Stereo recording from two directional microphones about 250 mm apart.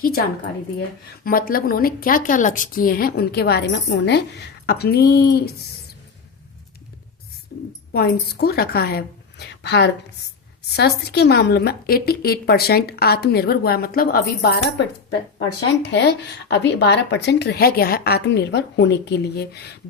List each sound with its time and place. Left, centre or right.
0.0 s a woman's voice: left
7.5 s a woman's voice: left